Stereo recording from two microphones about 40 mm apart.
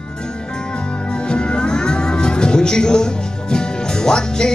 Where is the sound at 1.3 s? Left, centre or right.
Left.